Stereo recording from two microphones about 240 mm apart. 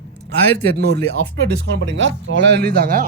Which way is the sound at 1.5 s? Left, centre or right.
Right.